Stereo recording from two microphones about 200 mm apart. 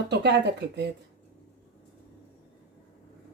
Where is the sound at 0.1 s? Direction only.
60° right (ahead or behind).